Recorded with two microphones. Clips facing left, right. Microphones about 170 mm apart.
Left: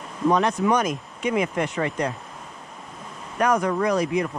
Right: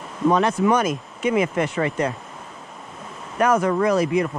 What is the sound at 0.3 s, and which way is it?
Speech, 5° right (ahead or behind).